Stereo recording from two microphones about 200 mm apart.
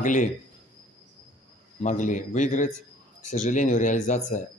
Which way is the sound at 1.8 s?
40° left (ahead or behind).